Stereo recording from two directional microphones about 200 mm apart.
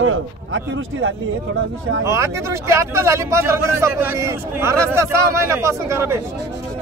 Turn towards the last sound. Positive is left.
turn(degrees=-15)  # may be behind; listen again after turning